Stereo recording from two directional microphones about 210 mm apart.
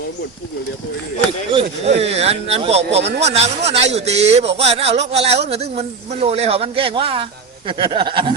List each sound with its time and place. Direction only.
1.8 s speech: 30° right (ahead or behind)